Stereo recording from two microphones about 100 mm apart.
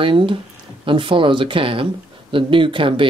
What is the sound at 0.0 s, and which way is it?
Speech, 60° right (ahead or behind).